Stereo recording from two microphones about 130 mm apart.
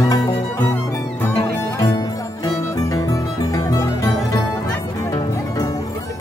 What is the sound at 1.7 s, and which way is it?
Music, 30° left (ahead or behind).